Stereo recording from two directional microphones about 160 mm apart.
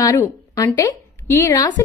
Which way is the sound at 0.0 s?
20° left (ahead or behind).